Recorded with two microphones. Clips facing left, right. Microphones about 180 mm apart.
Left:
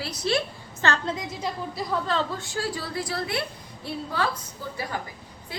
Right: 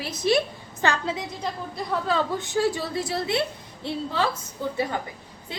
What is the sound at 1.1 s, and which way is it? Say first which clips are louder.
A woman's voice: even; centre (ahead or behind).